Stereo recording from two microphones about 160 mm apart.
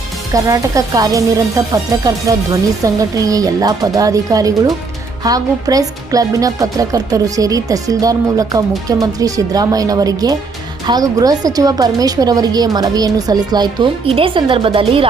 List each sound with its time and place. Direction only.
0.3 s speech: 20° right (ahead or behind)